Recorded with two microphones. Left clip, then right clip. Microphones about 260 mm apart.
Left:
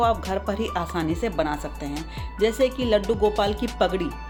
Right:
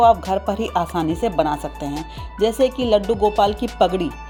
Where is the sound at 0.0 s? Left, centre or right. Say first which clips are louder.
Right 8 dB; centre.